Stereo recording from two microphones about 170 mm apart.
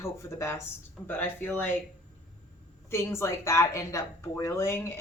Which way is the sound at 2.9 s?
15° left (ahead or behind).